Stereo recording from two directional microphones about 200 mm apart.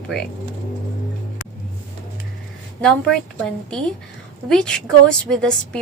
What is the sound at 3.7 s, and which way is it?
Speech, 5° left (ahead or behind).